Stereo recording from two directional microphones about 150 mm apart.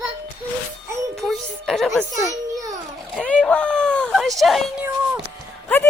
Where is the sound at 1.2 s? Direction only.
Centre (ahead or behind).